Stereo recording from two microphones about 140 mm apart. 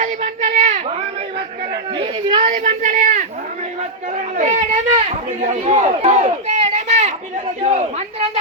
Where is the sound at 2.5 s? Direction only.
65° right (ahead or behind).